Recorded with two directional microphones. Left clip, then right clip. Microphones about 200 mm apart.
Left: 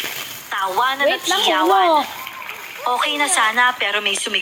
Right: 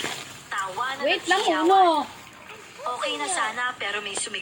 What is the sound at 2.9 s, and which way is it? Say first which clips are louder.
Speech: left 9 dB; 45° left (ahead or behind).